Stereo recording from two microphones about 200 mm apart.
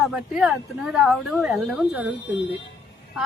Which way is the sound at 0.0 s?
Centre (ahead or behind).